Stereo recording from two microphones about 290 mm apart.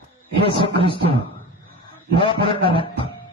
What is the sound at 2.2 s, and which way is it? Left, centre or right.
Speech, centre.